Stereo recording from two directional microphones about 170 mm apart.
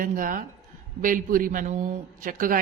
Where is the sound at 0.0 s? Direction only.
50° right (ahead or behind).